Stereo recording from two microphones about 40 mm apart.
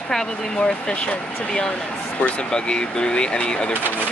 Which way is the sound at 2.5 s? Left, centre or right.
Left.